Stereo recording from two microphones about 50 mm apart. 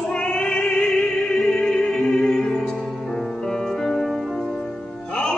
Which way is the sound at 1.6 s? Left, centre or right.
Centre.